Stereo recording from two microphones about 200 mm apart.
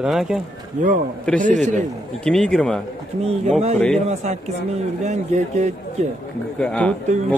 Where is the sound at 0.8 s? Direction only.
35° right (ahead or behind).